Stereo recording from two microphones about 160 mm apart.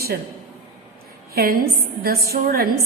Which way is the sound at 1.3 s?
70° right (ahead or behind).